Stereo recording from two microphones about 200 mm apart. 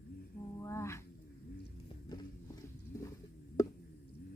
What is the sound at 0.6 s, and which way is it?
Dog, 15° left (ahead or behind).